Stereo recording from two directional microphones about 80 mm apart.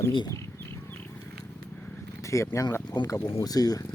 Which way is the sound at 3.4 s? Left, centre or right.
Left.